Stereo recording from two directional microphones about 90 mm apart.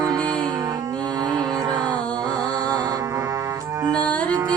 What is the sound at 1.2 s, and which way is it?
Music, 50° right (ahead or behind).